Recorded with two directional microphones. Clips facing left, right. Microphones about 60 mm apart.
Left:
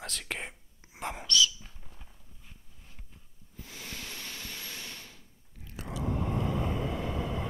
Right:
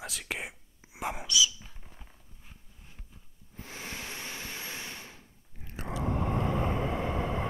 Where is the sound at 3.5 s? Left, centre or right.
Right.